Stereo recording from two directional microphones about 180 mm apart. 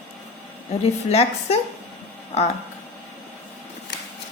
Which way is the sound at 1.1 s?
35° left (ahead or behind).